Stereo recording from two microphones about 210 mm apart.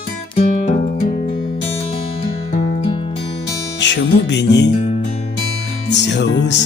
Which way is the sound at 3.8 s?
55° left (ahead or behind).